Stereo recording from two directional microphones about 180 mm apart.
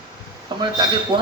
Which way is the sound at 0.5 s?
25° right (ahead or behind).